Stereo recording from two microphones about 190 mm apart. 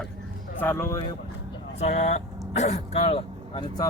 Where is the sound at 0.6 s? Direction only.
10° left (ahead or behind).